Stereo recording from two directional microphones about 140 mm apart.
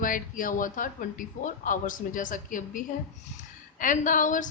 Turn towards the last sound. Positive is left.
turn(degrees=70)  # may be behind; listen again after turning